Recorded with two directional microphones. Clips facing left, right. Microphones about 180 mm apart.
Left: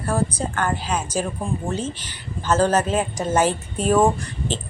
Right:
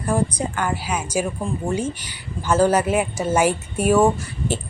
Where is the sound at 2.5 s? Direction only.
10° right (ahead or behind).